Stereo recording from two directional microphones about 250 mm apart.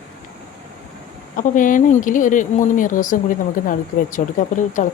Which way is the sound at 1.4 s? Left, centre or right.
Left.